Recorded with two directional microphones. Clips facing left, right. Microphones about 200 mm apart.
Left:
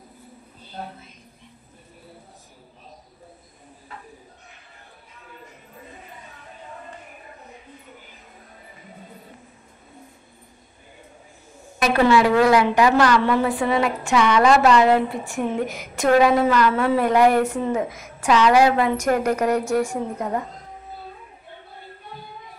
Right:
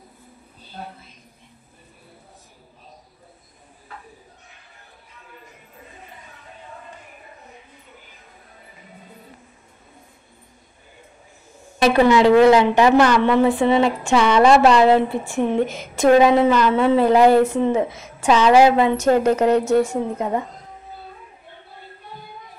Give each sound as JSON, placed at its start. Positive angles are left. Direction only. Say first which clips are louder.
{"t": 11.8, "sound": "a woman's voice", "louder": "right 3 dB", "side_deg": -20}